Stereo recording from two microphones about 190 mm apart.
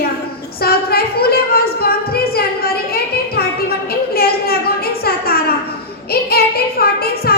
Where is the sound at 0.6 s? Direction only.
55° left (ahead or behind).